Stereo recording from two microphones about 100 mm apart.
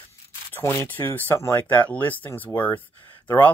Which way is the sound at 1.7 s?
15° left (ahead or behind).